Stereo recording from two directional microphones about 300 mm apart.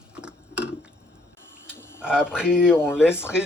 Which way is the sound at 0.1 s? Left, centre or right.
Centre.